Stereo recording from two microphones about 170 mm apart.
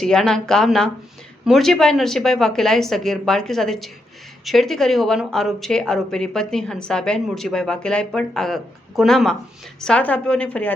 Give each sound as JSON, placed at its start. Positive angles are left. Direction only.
{"t": 0.0, "sound": "a woman's voice", "side_deg": 5}